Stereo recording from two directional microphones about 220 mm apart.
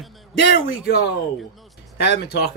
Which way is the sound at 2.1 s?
45° left (ahead or behind).